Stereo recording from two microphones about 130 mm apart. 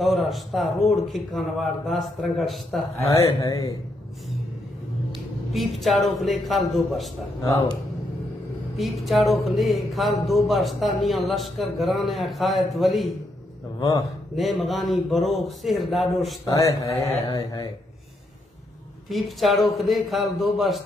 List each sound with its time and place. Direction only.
0.0 s a man's voice: centre (ahead or behind)
3.2 s speech: 25° left (ahead or behind)
5.5 s a man's voice: centre (ahead or behind)
8.7 s a man's voice: centre (ahead or behind)
13.7 s a man's voice: 30° left (ahead or behind)
14.3 s a man's voice: centre (ahead or behind)
16.4 s speech: 25° left (ahead or behind)
19.0 s a man's voice: centre (ahead or behind)